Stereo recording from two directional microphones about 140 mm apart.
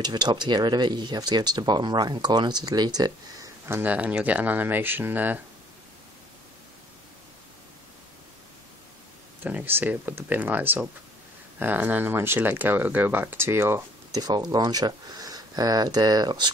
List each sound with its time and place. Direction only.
0.0 s speech: 30° right (ahead or behind); by 5.4 s 15° right (ahead or behind)
9.4 s speech: 15° right (ahead or behind)
14.2 s speech: 30° right (ahead or behind)